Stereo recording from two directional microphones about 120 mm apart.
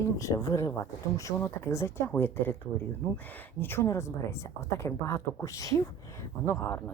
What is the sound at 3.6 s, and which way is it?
Speech, 20° left (ahead or behind).